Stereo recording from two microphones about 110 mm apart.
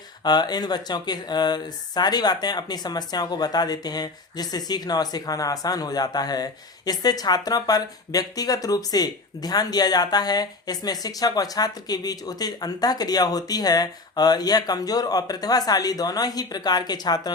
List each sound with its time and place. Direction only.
0.2 s speech: 40° left (ahead or behind)